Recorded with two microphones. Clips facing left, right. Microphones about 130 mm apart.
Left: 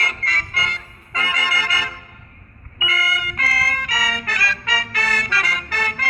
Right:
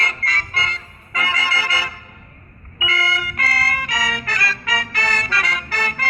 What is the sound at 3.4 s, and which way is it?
Music, centre (ahead or behind).